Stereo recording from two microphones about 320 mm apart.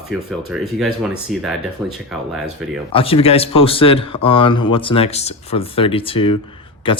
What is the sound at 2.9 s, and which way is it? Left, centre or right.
Speech, centre.